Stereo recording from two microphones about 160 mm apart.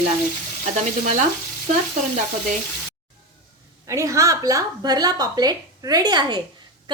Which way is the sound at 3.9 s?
20° right (ahead or behind).